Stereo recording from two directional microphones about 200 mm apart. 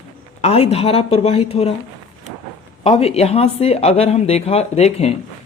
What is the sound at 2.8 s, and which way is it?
Speech, 30° left (ahead or behind).